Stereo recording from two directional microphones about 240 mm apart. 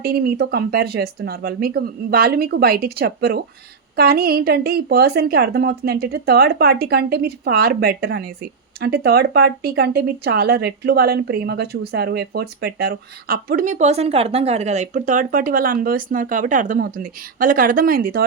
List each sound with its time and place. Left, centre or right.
0.0 s a woman's voice: right